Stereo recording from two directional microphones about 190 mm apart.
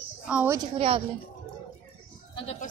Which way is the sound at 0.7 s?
30° right (ahead or behind).